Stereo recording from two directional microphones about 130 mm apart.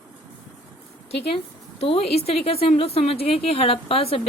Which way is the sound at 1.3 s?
50° left (ahead or behind).